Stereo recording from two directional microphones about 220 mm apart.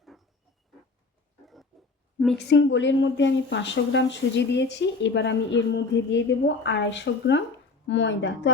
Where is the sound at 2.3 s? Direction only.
55° left (ahead or behind).